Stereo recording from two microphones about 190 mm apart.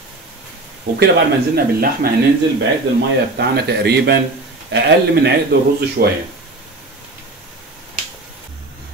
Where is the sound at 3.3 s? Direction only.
60° right (ahead or behind).